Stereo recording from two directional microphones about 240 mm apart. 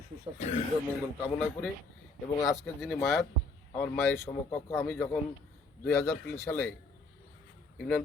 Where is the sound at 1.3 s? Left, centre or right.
Centre.